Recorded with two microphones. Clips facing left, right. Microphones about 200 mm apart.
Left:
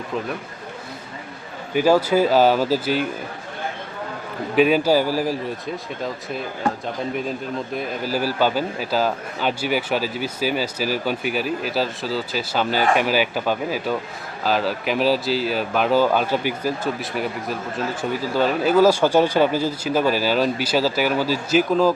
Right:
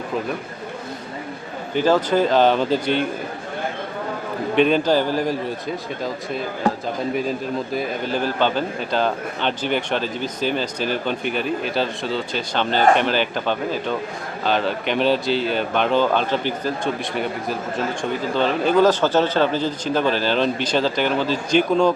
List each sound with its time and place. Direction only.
1.7 s speech: 10° left (ahead or behind)
4.5 s speech: 5° left (ahead or behind)